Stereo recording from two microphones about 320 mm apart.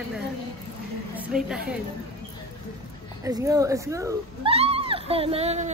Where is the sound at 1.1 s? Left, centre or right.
Centre.